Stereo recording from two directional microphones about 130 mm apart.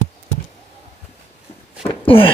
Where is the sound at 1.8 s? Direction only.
45° left (ahead or behind).